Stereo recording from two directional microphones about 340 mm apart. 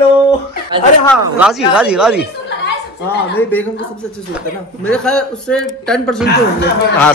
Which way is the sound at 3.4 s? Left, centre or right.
Centre.